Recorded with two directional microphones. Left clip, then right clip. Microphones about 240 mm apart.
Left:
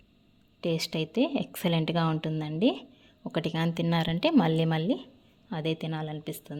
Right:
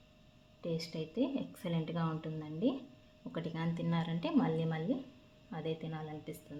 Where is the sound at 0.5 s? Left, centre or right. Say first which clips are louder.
Left 10 dB; left.